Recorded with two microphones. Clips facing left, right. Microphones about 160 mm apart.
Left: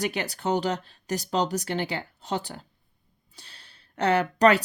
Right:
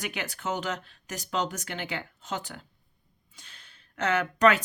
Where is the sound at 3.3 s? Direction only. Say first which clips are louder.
Left 3 dB; 35° left (ahead or behind).